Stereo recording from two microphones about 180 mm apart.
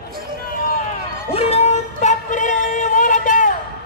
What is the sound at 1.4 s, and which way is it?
Music, 35° left (ahead or behind).